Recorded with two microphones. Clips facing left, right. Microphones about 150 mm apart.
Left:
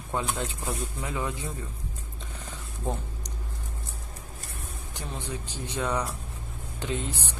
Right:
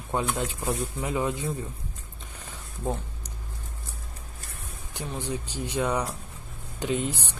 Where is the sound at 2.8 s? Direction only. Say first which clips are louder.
Right 2 dB; 5° right (ahead or behind).